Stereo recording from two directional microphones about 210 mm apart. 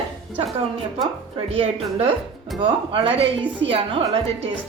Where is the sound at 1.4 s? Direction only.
30° right (ahead or behind).